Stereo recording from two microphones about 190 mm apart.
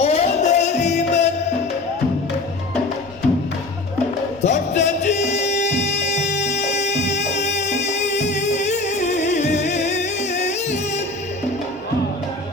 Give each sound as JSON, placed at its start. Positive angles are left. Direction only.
{"t": 0.0, "sound": "music", "side_deg": 35}
{"t": 4.4, "sound": "music", "side_deg": 40}